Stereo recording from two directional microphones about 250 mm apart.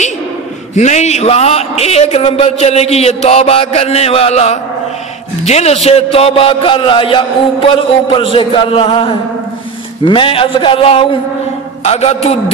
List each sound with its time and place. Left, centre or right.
0.7 s a man's voice: left